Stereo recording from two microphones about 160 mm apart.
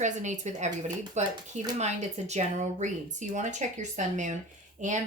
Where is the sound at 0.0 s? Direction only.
50° right (ahead or behind).